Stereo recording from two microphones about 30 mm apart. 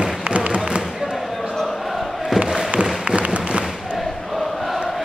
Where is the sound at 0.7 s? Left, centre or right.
Right.